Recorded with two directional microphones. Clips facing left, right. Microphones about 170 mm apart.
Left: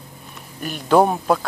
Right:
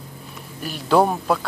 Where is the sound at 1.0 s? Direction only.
15° left (ahead or behind).